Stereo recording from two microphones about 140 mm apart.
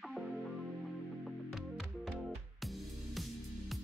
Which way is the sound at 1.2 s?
Centre (ahead or behind).